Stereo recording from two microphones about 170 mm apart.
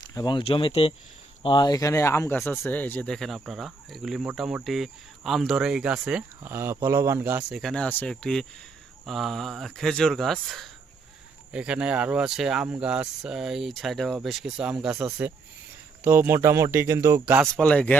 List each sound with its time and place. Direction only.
0.1 s speech: 25° left (ahead or behind); by 7.6 s 10° right (ahead or behind)
7.6 s speech: 5° left (ahead or behind)
17.5 s speech: 5° left (ahead or behind)